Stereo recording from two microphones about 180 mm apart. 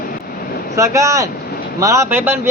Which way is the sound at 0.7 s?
15° right (ahead or behind).